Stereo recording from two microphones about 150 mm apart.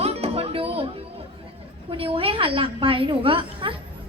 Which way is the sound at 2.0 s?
40° right (ahead or behind).